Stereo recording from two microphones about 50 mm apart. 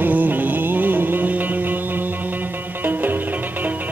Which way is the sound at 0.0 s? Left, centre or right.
Right.